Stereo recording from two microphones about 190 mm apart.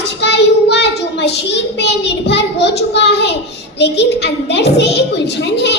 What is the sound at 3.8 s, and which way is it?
A woman's voice, 65° left (ahead or behind).